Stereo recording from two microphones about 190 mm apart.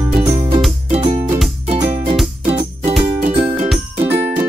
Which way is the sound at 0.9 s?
35° right (ahead or behind).